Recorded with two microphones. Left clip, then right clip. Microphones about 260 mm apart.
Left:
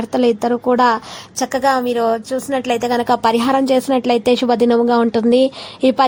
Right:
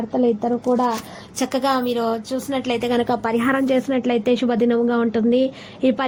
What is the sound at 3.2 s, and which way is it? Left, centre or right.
Speech, left.